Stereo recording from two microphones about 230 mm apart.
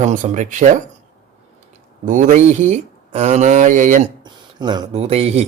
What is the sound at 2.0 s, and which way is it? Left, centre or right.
Speech, right.